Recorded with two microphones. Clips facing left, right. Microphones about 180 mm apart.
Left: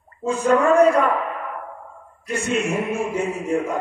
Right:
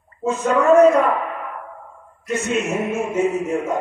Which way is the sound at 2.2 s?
30° left (ahead or behind).